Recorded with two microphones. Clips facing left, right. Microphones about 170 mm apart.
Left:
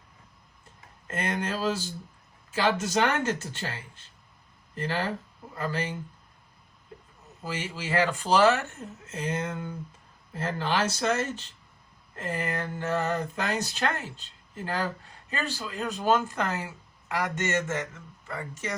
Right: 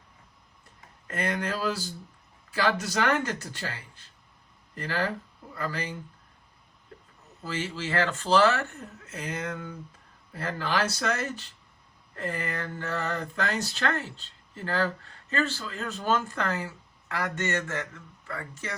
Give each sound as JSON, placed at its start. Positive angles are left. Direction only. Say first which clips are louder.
{"t": 1.0, "sound": "speech", "louder": "even", "side_deg": 25}
{"t": 7.4, "sound": "speech", "louder": "right 1 dB", "side_deg": 15}